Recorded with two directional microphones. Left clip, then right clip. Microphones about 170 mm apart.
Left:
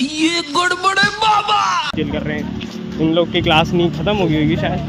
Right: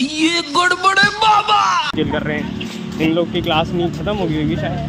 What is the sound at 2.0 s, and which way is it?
Speech, 35° right (ahead or behind).